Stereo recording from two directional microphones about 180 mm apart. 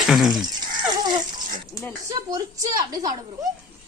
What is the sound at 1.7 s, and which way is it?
Speech, centre (ahead or behind).